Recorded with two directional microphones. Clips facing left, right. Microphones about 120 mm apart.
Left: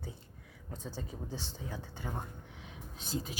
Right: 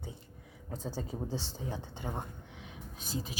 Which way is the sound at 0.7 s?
35° right (ahead or behind).